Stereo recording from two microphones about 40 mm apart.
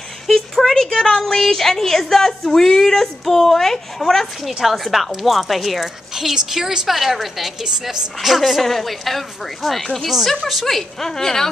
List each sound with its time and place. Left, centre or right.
0.7 s a woman's voice: centre
6.1 s a woman's voice: centre
6.9 s a woman's voice: centre